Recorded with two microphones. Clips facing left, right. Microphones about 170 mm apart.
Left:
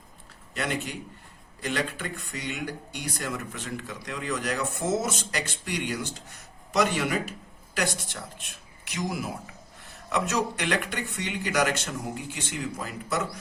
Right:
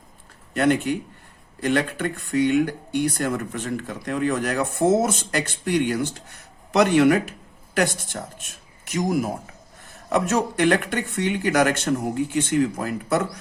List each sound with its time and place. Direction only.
0.5 s speech: 55° right (ahead or behind)